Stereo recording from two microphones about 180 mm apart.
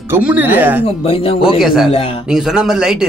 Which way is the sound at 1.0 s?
30° left (ahead or behind).